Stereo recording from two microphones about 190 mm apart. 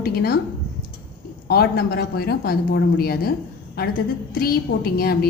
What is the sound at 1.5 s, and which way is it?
Speech, 55° left (ahead or behind).